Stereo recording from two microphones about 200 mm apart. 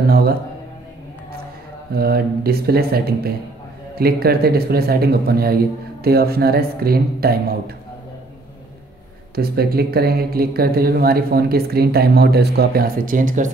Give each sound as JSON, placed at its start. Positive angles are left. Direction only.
{"t": 1.9, "sound": "speech", "side_deg": -50}
{"t": 9.3, "sound": "speech", "side_deg": -50}